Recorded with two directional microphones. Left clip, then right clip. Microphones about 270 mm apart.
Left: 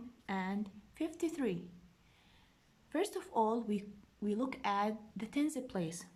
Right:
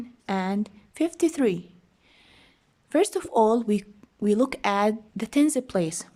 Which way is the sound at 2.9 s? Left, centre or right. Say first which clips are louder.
Right 13 dB; right.